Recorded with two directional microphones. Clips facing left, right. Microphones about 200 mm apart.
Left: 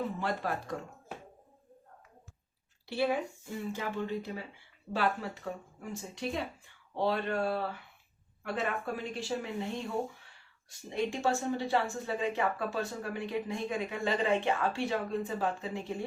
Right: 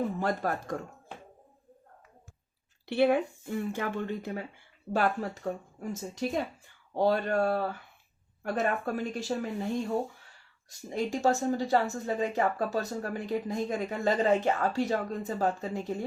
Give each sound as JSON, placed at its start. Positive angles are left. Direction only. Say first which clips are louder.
{"t": 0.2, "sound": "speech", "louder": "right 4 dB", "side_deg": -45}
{"t": 2.8, "sound": "speech", "louder": "right 6 dB", "side_deg": -60}
{"t": 10.7, "sound": "speech", "louder": "right 2 dB", "side_deg": -40}